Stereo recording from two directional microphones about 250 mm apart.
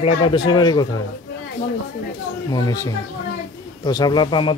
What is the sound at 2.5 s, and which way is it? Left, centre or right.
Speech, centre.